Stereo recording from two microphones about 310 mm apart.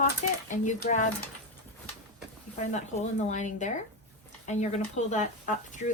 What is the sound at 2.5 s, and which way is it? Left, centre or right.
Speech, left.